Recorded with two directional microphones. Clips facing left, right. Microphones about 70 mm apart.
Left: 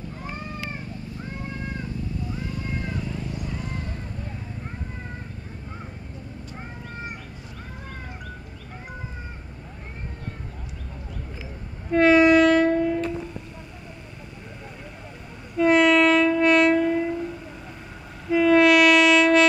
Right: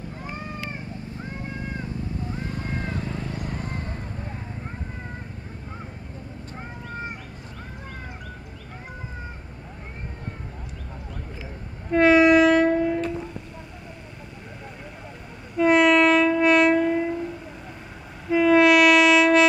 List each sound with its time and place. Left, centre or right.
2.3 s vehicle: right
11.9 s train: centre
15.5 s train: centre
18.3 s train: centre